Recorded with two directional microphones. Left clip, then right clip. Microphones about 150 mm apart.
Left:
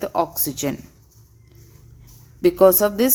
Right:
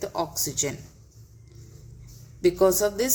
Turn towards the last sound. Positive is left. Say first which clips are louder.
# left 7 dB
turn(degrees=60)  # may be behind; listen again after turning